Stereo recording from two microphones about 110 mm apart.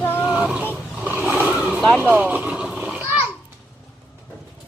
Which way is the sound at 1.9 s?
15° right (ahead or behind).